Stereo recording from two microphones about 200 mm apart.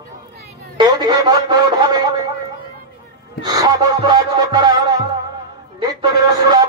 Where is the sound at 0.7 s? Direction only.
20° right (ahead or behind).